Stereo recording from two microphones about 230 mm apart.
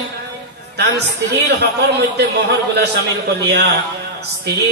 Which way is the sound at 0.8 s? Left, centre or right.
Right.